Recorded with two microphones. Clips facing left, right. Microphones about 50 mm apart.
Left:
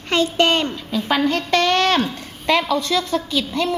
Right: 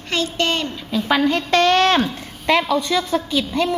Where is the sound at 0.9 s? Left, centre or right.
Centre.